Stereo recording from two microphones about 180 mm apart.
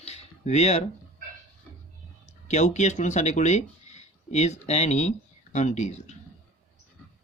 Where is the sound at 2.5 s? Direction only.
40° left (ahead or behind).